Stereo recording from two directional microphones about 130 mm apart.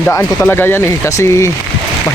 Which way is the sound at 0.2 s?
15° left (ahead or behind).